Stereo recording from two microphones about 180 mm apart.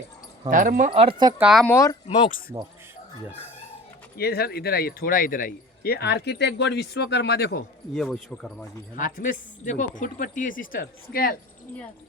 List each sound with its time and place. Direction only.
0.5 s speech: 45° right (ahead or behind)
0.9 s speech: 30° right (ahead or behind)
1.4 s speech: 5° right (ahead or behind)
1.6 s speech: 15° left (ahead or behind)
4.2 s speech: 60° left (ahead or behind)
7.9 s speech: 5° left (ahead or behind)
9.0 s speech: 50° left (ahead or behind)